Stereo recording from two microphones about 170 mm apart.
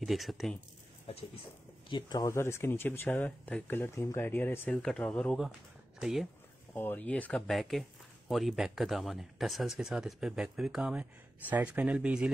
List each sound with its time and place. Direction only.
0.0 s speech: centre (ahead or behind)
1.1 s speech: 35° left (ahead or behind); by 6.2 s 5° right (ahead or behind)
6.7 s speech: 10° left (ahead or behind); by 12.3 s 5° right (ahead or behind)